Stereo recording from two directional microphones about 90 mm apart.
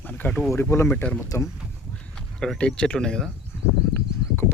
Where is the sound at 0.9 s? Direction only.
15° left (ahead or behind).